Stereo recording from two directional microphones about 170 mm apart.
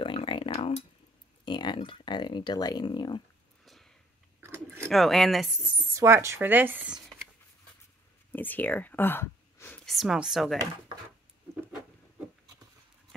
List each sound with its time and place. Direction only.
0.0 s a sound: 30° left (ahead or behind)
1.4 s speech: 25° left (ahead or behind)
3.6 s sniff: centre (ahead or behind)
4.4 s chewing: 15° right (ahead or behind)
4.8 s speech: centre (ahead or behind)
5.9 s speech: 15° right (ahead or behind)
8.3 s a sound: 10° left (ahead or behind)
9.8 s speech: centre (ahead or behind)